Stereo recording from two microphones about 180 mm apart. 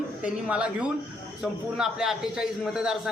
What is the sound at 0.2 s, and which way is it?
A man's voice, 5° right (ahead or behind).